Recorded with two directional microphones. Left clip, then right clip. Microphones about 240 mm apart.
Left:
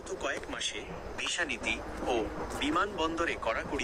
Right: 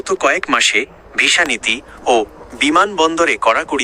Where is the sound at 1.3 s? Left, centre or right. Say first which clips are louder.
Right 17 dB; right.